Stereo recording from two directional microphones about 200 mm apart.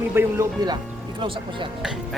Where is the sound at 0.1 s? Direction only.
10° right (ahead or behind).